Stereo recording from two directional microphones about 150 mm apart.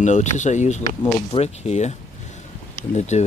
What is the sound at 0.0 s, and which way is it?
Speech, 50° left (ahead or behind).